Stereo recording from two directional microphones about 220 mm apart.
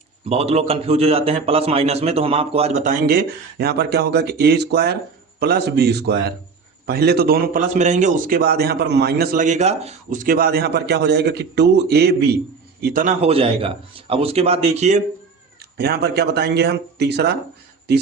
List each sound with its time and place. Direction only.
0.3 s a man's voice: 30° right (ahead or behind)
3.1 s a man's voice: 45° right (ahead or behind)
15.5 s a man's voice: 45° right (ahead or behind)